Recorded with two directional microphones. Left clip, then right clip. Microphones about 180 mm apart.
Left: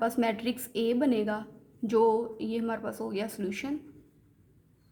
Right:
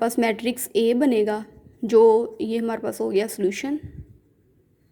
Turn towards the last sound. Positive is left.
turn(degrees=-30)  # may be behind; listen again after turning